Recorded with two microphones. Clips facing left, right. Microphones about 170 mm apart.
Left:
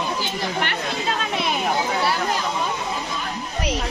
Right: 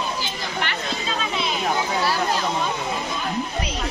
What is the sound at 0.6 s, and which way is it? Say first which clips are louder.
Speech: left 2 dB; 55° left (ahead or behind).